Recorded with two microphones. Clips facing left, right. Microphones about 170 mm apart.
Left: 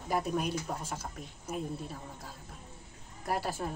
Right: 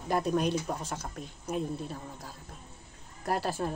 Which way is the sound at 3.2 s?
10° left (ahead or behind).